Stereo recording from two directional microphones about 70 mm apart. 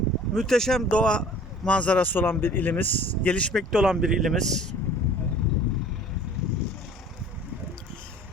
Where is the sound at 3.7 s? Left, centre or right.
Centre.